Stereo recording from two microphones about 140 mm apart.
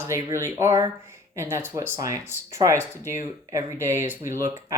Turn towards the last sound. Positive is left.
turn(degrees=-20)  # may be behind; listen again after turning